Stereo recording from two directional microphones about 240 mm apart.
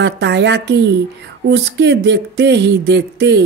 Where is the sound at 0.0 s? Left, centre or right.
Right.